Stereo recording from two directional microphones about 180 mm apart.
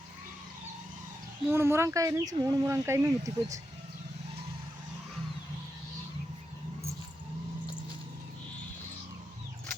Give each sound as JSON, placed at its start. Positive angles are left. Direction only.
{"t": 1.5, "sound": "speech", "side_deg": -15}